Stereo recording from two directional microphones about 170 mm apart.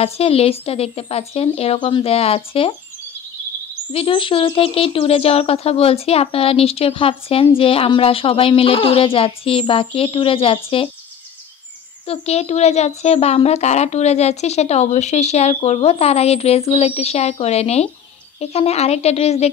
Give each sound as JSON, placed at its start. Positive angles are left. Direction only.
{"t": 0.0, "sound": "speech", "side_deg": 35}
{"t": 3.9, "sound": "speech", "side_deg": 30}
{"t": 12.1, "sound": "speech", "side_deg": 40}